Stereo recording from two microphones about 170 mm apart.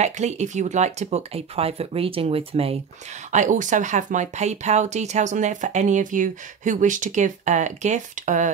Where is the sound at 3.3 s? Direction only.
45° right (ahead or behind).